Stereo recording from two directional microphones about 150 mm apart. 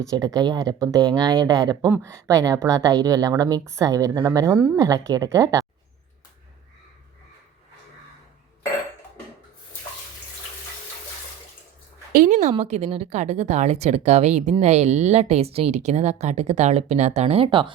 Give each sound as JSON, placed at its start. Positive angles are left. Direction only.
{"t": 0.0, "sound": "a woman's voice", "side_deg": -20}
{"t": 12.1, "sound": "speech", "side_deg": -60}